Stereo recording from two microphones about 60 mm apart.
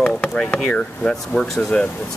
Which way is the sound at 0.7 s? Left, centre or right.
Centre.